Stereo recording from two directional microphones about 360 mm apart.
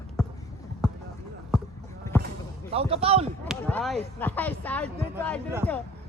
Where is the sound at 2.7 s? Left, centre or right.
Centre.